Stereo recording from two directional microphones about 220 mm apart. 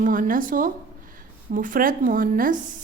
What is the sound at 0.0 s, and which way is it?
A woman's voice, 40° right (ahead or behind).